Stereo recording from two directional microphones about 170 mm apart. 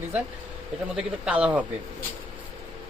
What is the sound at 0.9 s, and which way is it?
Speech, 5° right (ahead or behind).